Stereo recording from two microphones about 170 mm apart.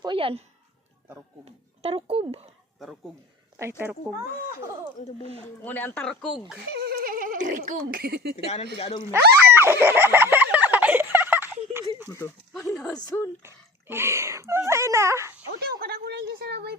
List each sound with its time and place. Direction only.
0.0 s a sound: 30° right (ahead or behind)
1.5 s speech: 35° right (ahead or behind)
3.6 s speech: 10° right (ahead or behind)
5.6 s speech: 10° left (ahead or behind)
6.7 s speech: 65° right (ahead or behind)
8.8 s speech: 30° left (ahead or behind)
9.5 s fowl: 15° right (ahead or behind)
12.6 s speech: 10° left (ahead or behind)
13.4 s speech: 15° right (ahead or behind)
15.6 s a woman's voice: 65° right (ahead or behind)